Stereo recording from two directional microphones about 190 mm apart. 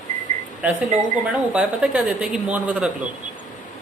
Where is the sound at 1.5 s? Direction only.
5° right (ahead or behind).